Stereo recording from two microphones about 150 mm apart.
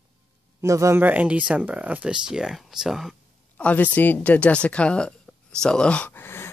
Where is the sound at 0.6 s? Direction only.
20° right (ahead or behind); by 3.1 s centre (ahead or behind).